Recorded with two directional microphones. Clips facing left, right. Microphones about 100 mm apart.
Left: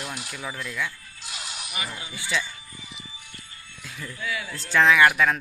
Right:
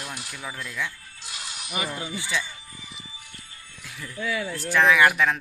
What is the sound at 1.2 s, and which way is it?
Music, 20° left (ahead or behind).